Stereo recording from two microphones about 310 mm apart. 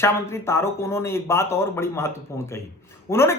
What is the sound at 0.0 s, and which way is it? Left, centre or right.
A woman's voice, centre.